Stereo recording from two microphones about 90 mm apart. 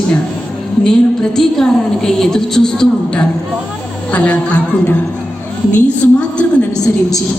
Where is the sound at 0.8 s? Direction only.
5° left (ahead or behind).